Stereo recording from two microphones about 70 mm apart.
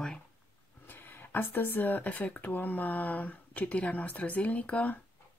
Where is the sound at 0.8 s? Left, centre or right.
Left.